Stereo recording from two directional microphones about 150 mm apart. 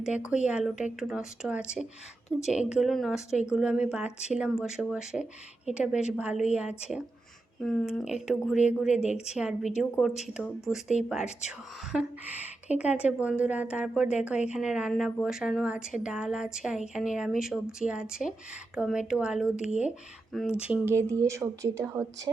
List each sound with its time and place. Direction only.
0.0 s a woman's voice: 5° right (ahead or behind)